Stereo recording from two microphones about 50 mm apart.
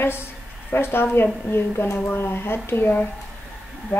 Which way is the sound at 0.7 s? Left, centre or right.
Left.